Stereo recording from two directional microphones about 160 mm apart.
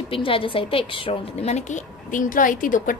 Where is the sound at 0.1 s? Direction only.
35° left (ahead or behind).